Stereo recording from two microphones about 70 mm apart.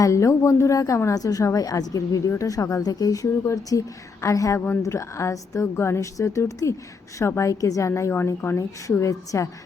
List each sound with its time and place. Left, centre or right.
0.0 s a woman's voice: left
8.9 s a woman's voice: left